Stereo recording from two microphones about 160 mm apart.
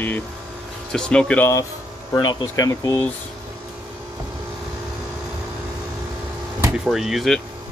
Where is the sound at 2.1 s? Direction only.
25° left (ahead or behind).